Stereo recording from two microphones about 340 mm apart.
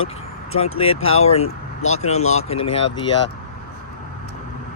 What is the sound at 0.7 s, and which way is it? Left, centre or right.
Speech, centre.